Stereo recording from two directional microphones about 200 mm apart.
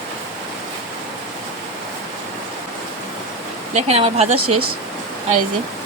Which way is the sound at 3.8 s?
30° right (ahead or behind).